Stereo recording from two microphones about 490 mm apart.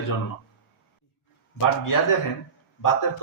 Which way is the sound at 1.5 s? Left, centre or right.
Left.